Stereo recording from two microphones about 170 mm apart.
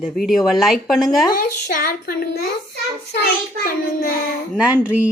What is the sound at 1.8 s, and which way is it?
Child singing, 60° left (ahead or behind).